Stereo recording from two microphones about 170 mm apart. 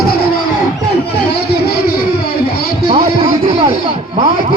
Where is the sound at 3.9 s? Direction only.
35° right (ahead or behind).